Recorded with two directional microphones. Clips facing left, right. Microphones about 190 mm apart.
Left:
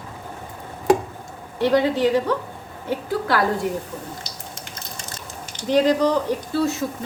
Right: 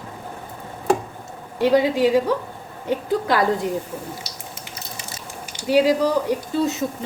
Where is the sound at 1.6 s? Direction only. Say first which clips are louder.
Right 1 dB; 10° right (ahead or behind).